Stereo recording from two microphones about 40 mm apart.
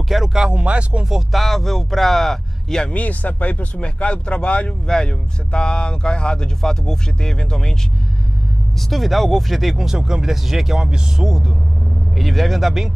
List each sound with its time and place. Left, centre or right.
0.3 s speech: centre
0.6 s speech: right
1.3 s speech: centre
2.9 s speech: left; by 7.7 s centre
8.9 s speech: centre
9.8 s speech: centre
12.2 s speech: centre